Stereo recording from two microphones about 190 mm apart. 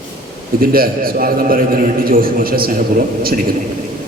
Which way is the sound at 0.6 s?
50° right (ahead or behind).